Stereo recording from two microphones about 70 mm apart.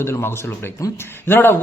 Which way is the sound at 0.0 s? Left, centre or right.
Left.